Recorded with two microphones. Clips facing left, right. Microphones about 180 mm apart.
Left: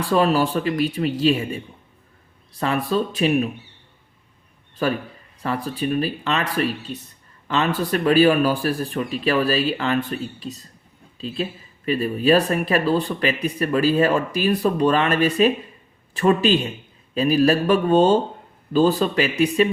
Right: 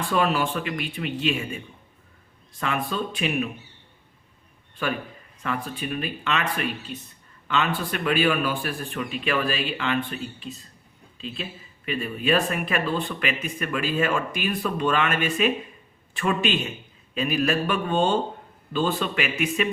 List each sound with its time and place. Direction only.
0.0 s speech: 35° left (ahead or behind)
4.8 s speech: 40° left (ahead or behind)